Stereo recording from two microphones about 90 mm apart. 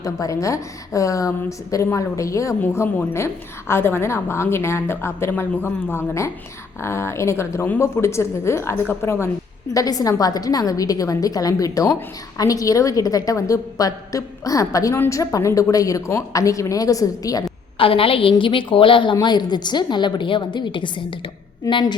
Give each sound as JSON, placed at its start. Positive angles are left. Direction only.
{"t": 0.0, "sound": "a woman's voice", "side_deg": 35}
{"t": 9.7, "sound": "a woman's voice", "side_deg": 40}
{"t": 17.7, "sound": "a woman's voice", "side_deg": 90}
{"t": 19.2, "sound": "a woman's voice", "side_deg": 55}